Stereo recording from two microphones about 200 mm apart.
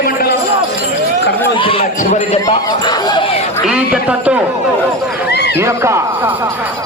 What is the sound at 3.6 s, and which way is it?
Speech, 5° right (ahead or behind).